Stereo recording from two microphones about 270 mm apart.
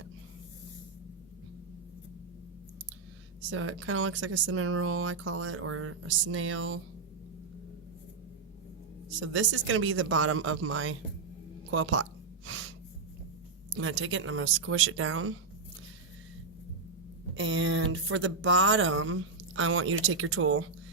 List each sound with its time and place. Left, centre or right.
3.5 s speech: right
9.2 s speech: right
12.5 s snort: right
13.7 s speech: right
17.3 s speech: right